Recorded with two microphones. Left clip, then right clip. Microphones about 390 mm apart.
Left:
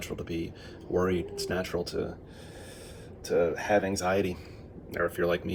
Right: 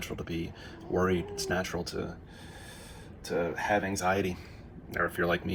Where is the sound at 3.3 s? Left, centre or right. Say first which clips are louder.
Left 4 dB; right.